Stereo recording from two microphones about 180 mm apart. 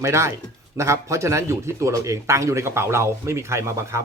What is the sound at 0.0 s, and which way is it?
Speech, 15° right (ahead or behind).